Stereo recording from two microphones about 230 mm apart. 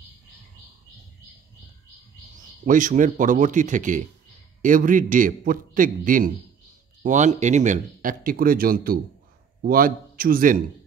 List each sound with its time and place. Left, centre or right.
2.6 s speech: right